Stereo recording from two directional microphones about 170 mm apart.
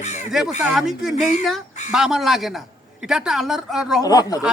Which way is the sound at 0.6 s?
Centre (ahead or behind).